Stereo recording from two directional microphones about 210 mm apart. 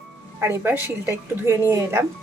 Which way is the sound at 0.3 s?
10° right (ahead or behind).